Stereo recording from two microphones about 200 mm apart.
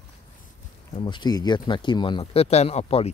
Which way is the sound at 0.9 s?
25° left (ahead or behind).